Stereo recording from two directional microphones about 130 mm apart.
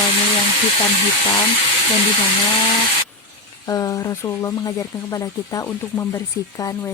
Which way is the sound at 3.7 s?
25° left (ahead or behind).